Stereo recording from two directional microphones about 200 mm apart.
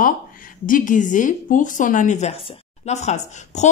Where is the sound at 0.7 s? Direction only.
40° left (ahead or behind).